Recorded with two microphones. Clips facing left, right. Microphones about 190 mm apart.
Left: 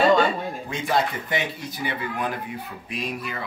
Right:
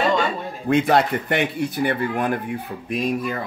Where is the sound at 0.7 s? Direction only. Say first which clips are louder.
Right 8 dB; 60° right (ahead or behind).